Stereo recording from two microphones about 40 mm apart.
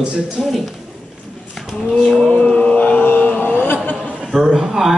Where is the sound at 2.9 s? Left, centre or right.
Left.